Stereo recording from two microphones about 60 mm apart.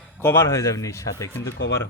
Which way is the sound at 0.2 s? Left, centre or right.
Left.